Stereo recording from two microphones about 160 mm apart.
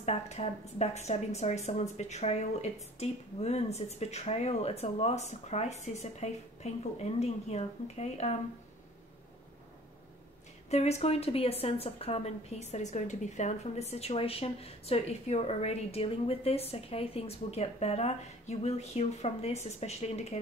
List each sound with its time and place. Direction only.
0.0 s a woman's voice: 45° left (ahead or behind)
10.7 s a woman's voice: 45° left (ahead or behind)